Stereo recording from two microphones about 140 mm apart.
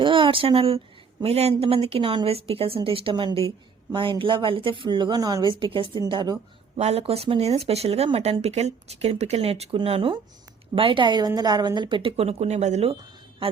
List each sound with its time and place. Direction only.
0.0 s speech: 35° right (ahead or behind)
6.7 s speech: 50° right (ahead or behind)